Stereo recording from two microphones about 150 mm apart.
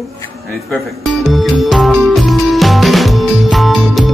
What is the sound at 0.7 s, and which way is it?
Music, centre (ahead or behind).